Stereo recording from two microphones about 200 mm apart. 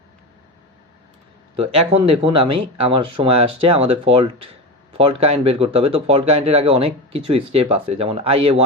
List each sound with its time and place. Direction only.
1.7 s speech: 30° right (ahead or behind)